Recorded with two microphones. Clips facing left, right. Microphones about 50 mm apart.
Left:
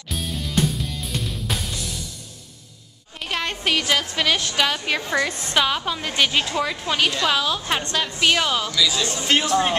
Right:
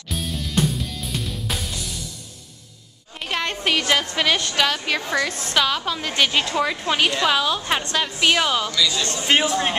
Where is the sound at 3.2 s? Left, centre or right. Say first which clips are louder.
Right 1 dB; centre.